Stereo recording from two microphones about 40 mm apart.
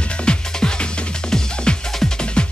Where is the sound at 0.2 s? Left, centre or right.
Left.